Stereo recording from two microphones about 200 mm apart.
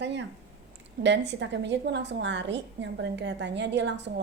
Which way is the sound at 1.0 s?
60° right (ahead or behind).